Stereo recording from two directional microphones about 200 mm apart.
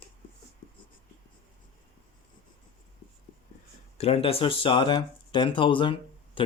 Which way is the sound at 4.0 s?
30° left (ahead or behind).